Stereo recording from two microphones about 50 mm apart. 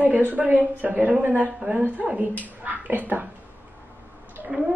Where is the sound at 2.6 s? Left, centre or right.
Right.